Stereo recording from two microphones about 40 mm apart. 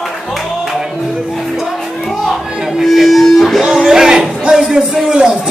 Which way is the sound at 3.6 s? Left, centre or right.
Centre.